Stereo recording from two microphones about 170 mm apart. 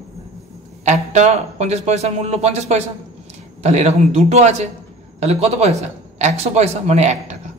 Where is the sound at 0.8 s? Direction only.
45° right (ahead or behind).